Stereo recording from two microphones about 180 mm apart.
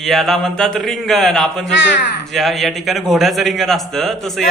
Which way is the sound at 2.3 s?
Centre (ahead or behind).